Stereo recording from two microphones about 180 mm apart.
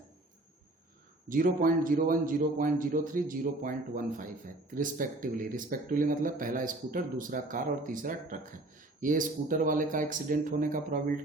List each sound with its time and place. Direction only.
1.3 s a man's voice: 50° right (ahead or behind)